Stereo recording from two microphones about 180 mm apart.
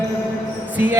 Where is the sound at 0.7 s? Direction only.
10° right (ahead or behind).